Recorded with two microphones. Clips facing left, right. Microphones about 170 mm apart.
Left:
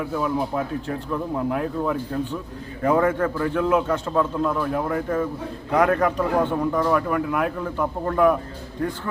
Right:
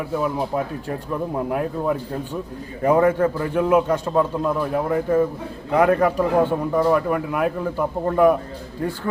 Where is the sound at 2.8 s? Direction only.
15° right (ahead or behind).